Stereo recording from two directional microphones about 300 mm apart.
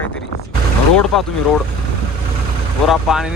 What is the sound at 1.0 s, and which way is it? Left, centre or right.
Speech, centre.